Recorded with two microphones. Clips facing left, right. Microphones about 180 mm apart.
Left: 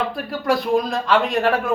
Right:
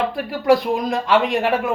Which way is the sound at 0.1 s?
15° right (ahead or behind).